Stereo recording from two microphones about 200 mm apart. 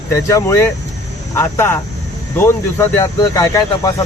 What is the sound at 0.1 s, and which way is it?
Speech, 15° left (ahead or behind).